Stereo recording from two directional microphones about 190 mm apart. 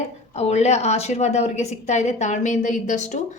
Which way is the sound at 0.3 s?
35° left (ahead or behind).